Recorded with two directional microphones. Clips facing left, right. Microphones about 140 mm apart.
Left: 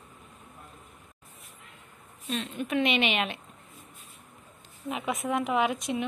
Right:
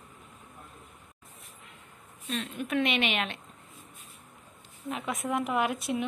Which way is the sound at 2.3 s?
Centre (ahead or behind).